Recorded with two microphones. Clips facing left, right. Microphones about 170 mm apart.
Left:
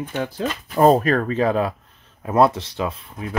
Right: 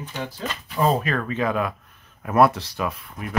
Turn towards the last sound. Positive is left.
turn(degrees=25)  # may be behind; listen again after turning